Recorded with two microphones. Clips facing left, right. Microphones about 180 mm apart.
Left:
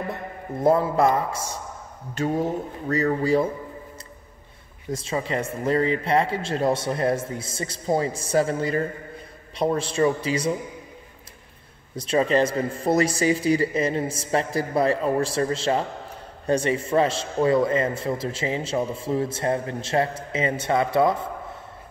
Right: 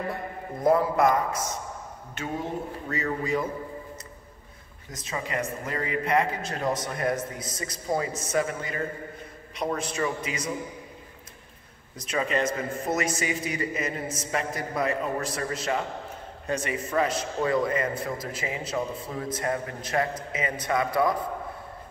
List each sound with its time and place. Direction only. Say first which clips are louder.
0.1 s a man's voice: left 2 dB; 25° left (ahead or behind)
4.9 s a man's voice: left 5 dB; 30° left (ahead or behind)
12.0 s a man's voice: left 6 dB; 30° left (ahead or behind)